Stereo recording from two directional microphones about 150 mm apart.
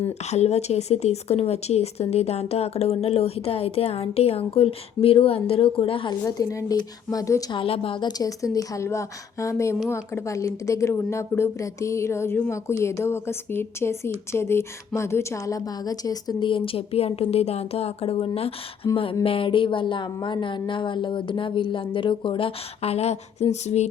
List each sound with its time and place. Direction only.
0.3 s speech: 45° left (ahead or behind)
6.2 s a woman's voice: 20° left (ahead or behind)
7.6 s speech: 35° left (ahead or behind)
8.5 s a woman's voice: 20° left (ahead or behind); by 18.3 s 40° left (ahead or behind)
18.8 s a woman's voice: 25° left (ahead or behind)
19.2 s speech: 35° left (ahead or behind)